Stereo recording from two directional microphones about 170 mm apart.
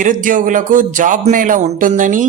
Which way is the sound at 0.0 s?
50° right (ahead or behind).